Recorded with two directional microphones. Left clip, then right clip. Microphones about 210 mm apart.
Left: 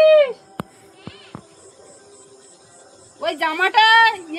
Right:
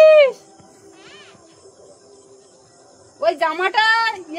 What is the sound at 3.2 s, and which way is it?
Speech, 55° right (ahead or behind).